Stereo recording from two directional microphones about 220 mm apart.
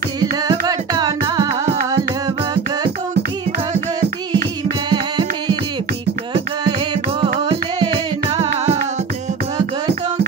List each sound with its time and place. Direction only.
0.2 s music: 15° right (ahead or behind)
4.8 s music: 20° right (ahead or behind)